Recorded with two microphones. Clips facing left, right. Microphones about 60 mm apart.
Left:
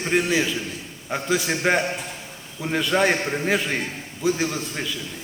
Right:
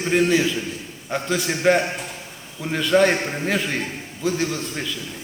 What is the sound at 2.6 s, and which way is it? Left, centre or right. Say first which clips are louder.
A man's voice: right 3 dB; centre.